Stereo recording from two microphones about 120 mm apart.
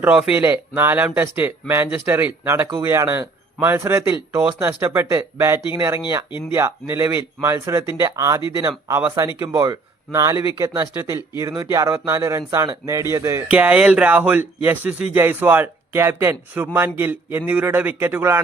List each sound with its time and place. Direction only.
0.3 s speech: 15° right (ahead or behind)
8.9 s speech: 15° right (ahead or behind)
13.5 s speech: 10° right (ahead or behind)